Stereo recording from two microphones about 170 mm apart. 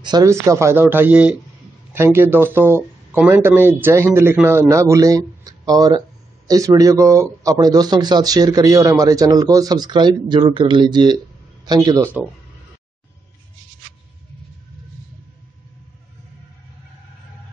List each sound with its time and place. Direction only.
0.0 s speech: 20° right (ahead or behind)